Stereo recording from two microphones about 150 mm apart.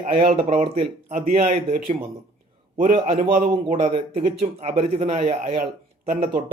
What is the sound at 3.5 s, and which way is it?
Speech, 40° right (ahead or behind).